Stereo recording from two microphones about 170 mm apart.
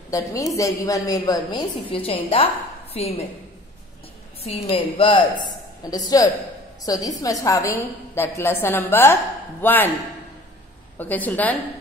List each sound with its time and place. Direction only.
0.1 s a woman's voice: 20° left (ahead or behind)
4.4 s a woman's voice: 35° left (ahead or behind); by 9.9 s 10° left (ahead or behind)
11.0 s a woman's voice: 10° left (ahead or behind)